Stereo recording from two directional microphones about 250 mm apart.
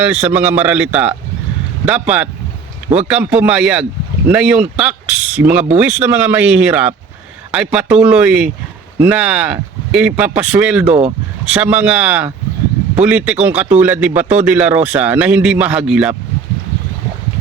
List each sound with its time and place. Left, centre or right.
0.0 s a man's voice: centre
10.8 s speech: right
11.4 s speech: centre